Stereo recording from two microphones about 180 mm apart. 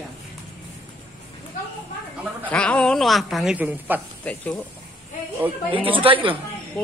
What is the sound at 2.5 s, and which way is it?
A woman's voice, 5° left (ahead or behind).